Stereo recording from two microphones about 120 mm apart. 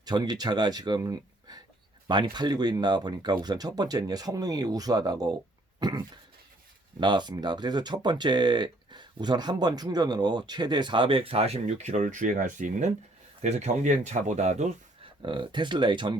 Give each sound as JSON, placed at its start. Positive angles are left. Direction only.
{"t": 0.0, "sound": "speech", "side_deg": -35}
{"t": 13.4, "sound": "speech", "side_deg": -70}
{"t": 15.2, "sound": "speech", "side_deg": -40}